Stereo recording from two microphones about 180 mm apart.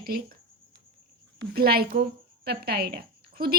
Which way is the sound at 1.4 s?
55° right (ahead or behind).